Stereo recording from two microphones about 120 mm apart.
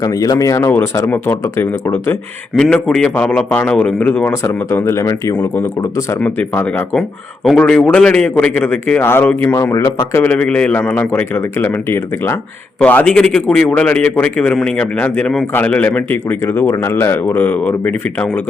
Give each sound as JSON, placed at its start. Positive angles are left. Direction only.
{"t": 0.0, "sound": "speech", "side_deg": 30}
{"t": 2.7, "sound": "a man's voice", "side_deg": 5}
{"t": 4.4, "sound": "a man's voice", "side_deg": 25}